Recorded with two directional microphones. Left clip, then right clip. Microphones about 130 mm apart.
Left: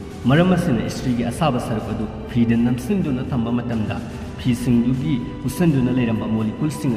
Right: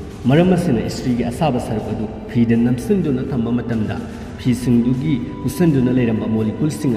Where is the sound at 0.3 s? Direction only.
5° right (ahead or behind).